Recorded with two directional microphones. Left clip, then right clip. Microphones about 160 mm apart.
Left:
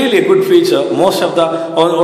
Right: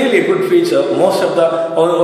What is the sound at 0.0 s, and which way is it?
Speech, 30° left (ahead or behind).